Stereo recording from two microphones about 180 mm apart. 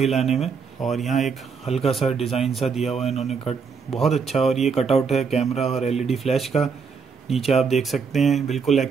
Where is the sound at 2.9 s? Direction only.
35° left (ahead or behind).